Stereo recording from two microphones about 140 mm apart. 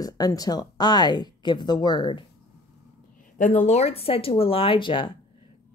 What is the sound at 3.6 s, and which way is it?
A woman's voice, 55° left (ahead or behind).